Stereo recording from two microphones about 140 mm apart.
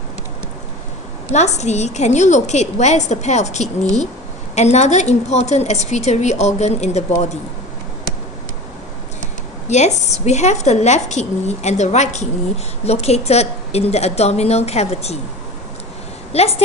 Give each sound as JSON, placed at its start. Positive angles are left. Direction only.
{"t": 1.3, "sound": "a woman's voice", "side_deg": 55}
{"t": 9.6, "sound": "a woman's voice", "side_deg": 55}
{"t": 16.3, "sound": "a woman's voice", "side_deg": 50}